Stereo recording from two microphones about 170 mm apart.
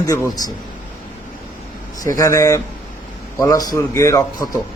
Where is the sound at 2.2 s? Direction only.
15° left (ahead or behind).